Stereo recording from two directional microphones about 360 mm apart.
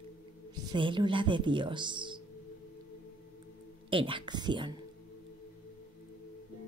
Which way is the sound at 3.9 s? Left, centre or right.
Centre.